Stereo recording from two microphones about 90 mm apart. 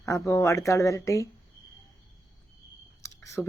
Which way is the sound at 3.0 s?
30° left (ahead or behind).